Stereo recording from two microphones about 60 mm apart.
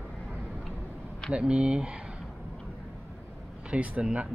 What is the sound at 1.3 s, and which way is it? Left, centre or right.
Speech, centre.